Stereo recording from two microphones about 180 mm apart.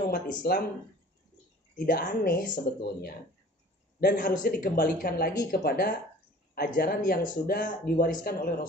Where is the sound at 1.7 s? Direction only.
55° left (ahead or behind).